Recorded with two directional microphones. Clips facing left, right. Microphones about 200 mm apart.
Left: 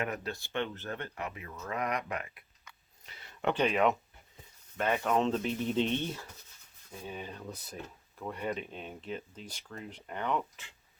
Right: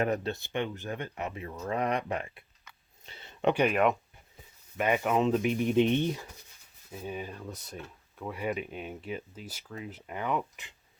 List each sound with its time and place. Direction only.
0.0 s speech: 30° right (ahead or behind)
3.1 s a sound: 25° right (ahead or behind)
3.5 s speech: 10° right (ahead or behind)